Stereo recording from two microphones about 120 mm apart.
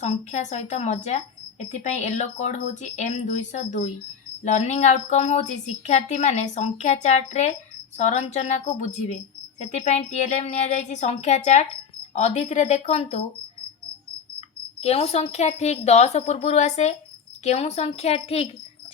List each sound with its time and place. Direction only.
0.0 s speech: 75° left (ahead or behind)
4.4 s speech: 70° left (ahead or behind)
14.8 s a woman's voice: 60° left (ahead or behind)